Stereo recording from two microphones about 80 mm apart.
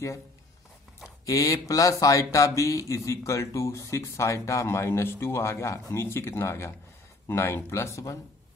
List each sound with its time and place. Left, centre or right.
1.2 s speech: left